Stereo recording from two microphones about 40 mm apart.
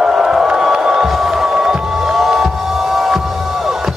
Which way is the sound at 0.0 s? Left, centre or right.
Centre.